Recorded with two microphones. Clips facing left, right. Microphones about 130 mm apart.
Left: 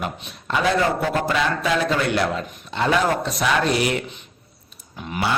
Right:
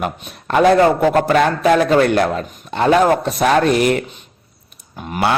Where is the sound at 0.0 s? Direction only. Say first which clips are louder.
Right 6 dB; 50° right (ahead or behind).